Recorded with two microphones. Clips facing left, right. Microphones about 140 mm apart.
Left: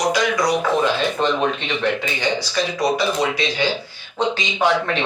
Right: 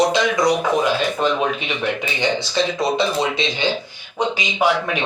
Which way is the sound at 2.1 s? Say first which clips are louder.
Right 2 dB; 25° right (ahead or behind).